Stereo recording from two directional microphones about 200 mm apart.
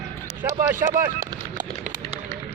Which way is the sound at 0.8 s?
40° right (ahead or behind).